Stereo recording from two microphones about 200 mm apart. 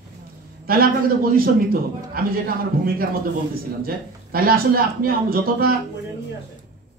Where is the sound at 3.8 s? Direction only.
50° right (ahead or behind).